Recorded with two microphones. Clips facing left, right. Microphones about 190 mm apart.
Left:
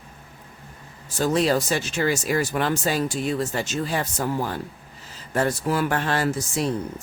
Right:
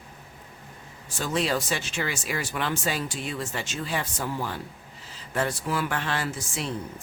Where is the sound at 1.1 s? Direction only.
40° left (ahead or behind).